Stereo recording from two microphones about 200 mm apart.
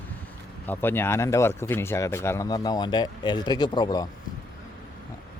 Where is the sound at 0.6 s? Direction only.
10° left (ahead or behind).